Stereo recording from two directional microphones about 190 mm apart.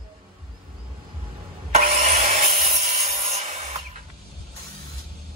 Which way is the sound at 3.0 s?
40° right (ahead or behind).